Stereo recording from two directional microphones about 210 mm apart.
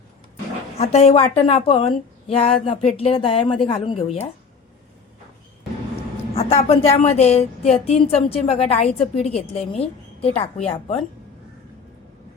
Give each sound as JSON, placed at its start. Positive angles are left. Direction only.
{"t": 0.8, "sound": "speech", "side_deg": 30}
{"t": 6.3, "sound": "speech", "side_deg": 25}